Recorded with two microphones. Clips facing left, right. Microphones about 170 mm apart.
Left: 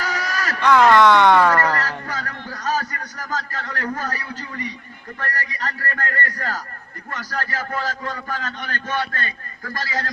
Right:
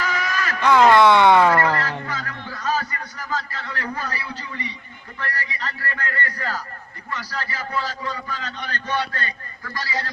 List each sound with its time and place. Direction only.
0.0 s a sound: 40° left (ahead or behind)
0.6 s speech: 10° right (ahead or behind)
2.0 s a man's voice: 40° left (ahead or behind)